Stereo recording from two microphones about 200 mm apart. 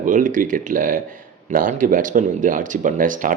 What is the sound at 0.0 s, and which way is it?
Speech, 40° right (ahead or behind).